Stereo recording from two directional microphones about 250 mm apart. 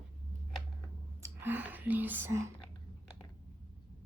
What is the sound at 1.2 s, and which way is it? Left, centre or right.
Whispering, centre.